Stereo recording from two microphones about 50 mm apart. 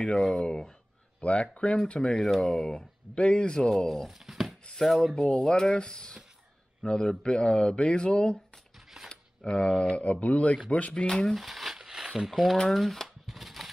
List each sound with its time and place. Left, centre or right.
0.0 s speech: centre
1.2 s speech: left
2.0 s speech: centre
2.4 s speech: centre
4.1 s speech: centre
5.2 s speech: centre
11.1 s speech: centre
11.3 s crumpling: centre
12.3 s speech: centre
12.7 s a sound: centre